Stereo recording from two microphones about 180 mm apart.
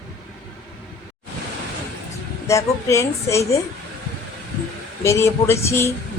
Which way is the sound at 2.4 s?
15° left (ahead or behind).